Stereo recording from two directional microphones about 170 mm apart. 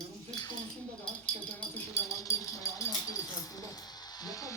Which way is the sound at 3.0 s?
20° left (ahead or behind).